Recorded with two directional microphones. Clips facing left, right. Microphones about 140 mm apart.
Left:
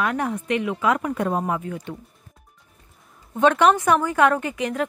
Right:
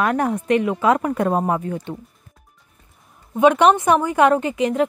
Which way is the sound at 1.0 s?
50° right (ahead or behind).